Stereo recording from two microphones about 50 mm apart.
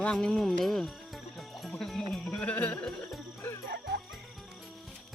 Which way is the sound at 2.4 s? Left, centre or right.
Left.